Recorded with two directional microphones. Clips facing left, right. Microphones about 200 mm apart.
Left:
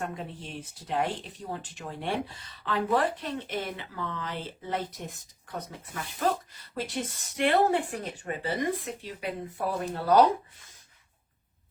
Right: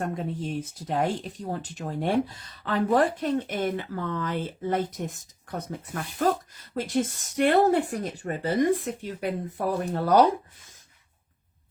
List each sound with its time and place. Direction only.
0.0 s speech: 40° right (ahead or behind)